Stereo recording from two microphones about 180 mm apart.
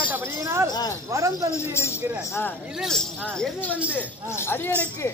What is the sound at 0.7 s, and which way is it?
Speech, 20° left (ahead or behind).